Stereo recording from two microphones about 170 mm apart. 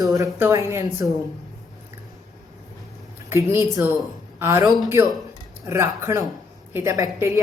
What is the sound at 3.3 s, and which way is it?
A woman's voice, 15° right (ahead or behind).